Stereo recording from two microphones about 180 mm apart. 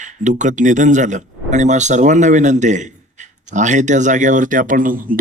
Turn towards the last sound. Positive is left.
turn(degrees=-50)  # may be behind; listen again after turning